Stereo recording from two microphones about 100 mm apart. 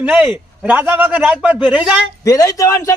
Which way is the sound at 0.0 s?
10° right (ahead or behind).